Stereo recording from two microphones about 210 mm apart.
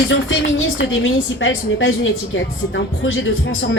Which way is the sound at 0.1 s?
70° left (ahead or behind).